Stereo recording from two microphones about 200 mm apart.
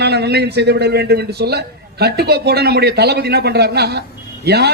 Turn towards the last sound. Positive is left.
turn(degrees=-55)  # may be behind; listen again after turning